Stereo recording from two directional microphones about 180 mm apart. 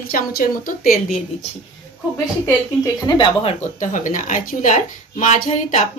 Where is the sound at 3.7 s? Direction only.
45° left (ahead or behind).